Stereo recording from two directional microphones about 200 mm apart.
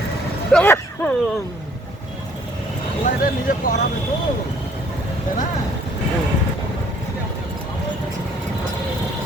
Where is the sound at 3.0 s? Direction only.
45° left (ahead or behind).